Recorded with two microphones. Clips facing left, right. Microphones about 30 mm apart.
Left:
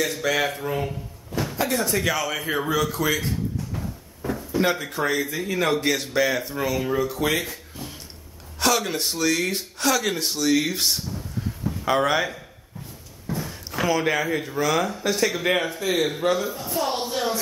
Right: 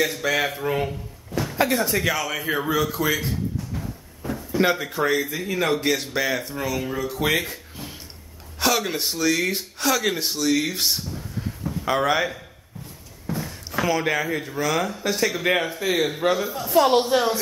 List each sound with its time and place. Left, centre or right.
0.0 s speech: centre
1.5 s a sound: centre
4.6 s speech: centre
7.4 s a sound: centre
8.5 s speech: centre
13.4 s speech: centre
16.5 s a woman's voice: right